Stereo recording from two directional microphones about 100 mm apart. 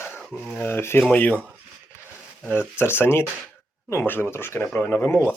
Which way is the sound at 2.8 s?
25° left (ahead or behind).